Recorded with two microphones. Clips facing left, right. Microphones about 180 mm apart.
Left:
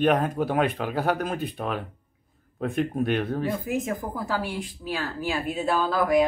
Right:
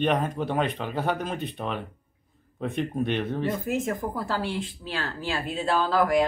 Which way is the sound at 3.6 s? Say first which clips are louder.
Right 1 dB; 15° left (ahead or behind).